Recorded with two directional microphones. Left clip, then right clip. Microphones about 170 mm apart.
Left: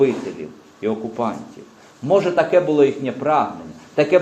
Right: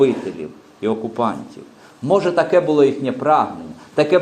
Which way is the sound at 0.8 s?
35° right (ahead or behind).